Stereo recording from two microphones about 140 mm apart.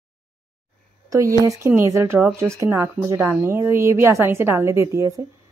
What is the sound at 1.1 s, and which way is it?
A woman's voice, 25° right (ahead or behind).